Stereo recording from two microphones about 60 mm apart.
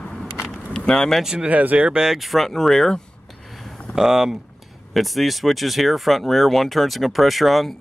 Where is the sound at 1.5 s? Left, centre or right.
Right.